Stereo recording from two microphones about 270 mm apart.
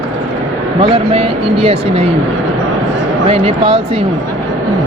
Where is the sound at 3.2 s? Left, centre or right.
Right.